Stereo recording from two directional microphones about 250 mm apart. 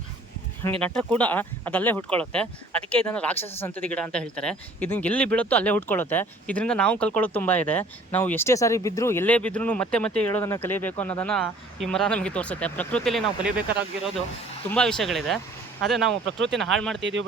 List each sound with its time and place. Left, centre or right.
0.8 s speech: centre
16.2 s speech: right
16.6 s speech: centre
17.0 s speech: right